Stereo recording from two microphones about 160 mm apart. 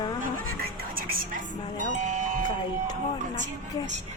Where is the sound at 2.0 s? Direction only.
50° right (ahead or behind).